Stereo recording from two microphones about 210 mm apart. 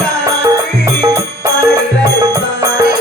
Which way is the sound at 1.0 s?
15° right (ahead or behind).